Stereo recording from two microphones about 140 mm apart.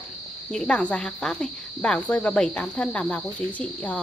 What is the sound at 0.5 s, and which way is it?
Speech, 5° left (ahead or behind).